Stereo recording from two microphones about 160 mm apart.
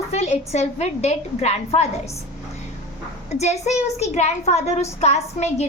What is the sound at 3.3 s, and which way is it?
A woman's voice, 45° left (ahead or behind).